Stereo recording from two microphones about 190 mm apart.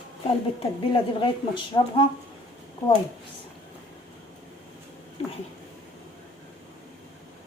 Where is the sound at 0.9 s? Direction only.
25° left (ahead or behind).